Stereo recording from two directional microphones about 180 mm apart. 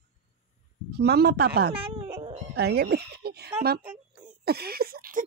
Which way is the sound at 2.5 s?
65° right (ahead or behind).